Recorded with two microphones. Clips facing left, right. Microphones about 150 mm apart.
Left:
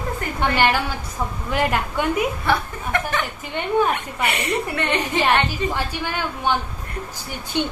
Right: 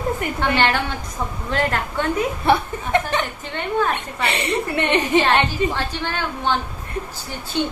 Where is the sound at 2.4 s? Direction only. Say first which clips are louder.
Right 4 dB; 25° right (ahead or behind).